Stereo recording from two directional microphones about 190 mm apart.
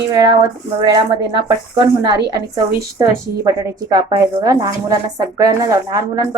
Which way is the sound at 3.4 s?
15° right (ahead or behind).